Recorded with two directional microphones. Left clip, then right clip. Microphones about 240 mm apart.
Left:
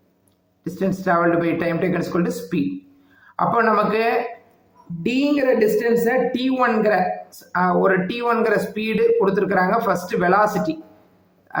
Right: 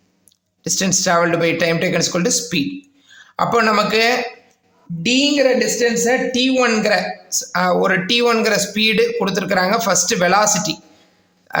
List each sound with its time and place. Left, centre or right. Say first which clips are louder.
0.8 s speech: right 3 dB; right